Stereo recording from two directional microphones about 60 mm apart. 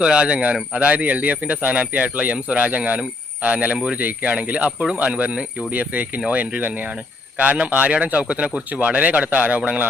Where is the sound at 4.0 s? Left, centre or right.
Right.